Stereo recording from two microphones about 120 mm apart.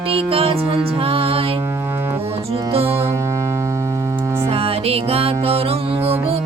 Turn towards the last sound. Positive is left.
turn(degrees=-55)  # may be behind; listen again after turning